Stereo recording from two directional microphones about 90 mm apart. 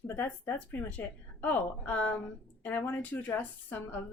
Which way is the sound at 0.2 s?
20° left (ahead or behind).